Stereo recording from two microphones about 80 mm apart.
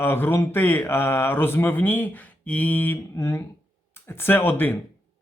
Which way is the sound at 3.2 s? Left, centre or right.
Left.